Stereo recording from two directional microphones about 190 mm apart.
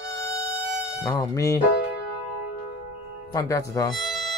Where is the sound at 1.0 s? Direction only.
15° left (ahead or behind).